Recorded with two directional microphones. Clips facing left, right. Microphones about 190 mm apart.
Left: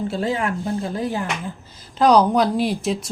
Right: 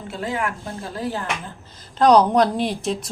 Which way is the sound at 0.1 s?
30° left (ahead or behind).